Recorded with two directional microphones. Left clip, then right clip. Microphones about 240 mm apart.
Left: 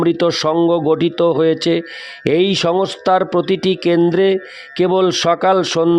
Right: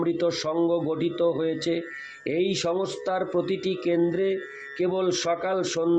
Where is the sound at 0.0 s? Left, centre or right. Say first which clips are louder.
Left 10 dB; left.